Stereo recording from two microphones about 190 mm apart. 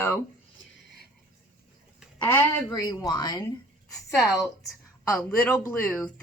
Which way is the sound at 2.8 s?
20° left (ahead or behind).